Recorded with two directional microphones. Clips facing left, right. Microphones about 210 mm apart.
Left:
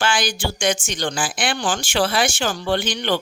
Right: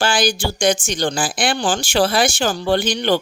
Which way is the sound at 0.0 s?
35° right (ahead or behind).